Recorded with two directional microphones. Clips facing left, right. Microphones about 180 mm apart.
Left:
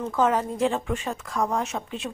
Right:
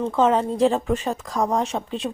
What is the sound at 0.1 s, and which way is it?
Speech, 25° right (ahead or behind).